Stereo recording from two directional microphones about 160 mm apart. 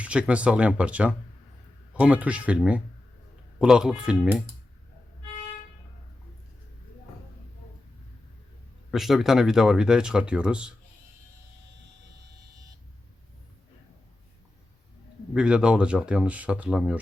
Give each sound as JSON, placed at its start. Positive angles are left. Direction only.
{"t": 0.0, "sound": "speech", "side_deg": -5}
{"t": 8.9, "sound": "speech", "side_deg": 0}
{"t": 15.3, "sound": "speech", "side_deg": -5}